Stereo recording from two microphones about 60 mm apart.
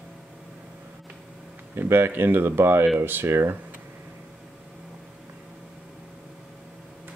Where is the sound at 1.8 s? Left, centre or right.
Right.